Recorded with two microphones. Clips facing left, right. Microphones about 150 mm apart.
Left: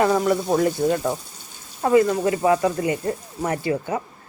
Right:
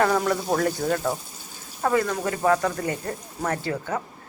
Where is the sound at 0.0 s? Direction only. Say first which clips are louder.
Left 3 dB; 10° left (ahead or behind).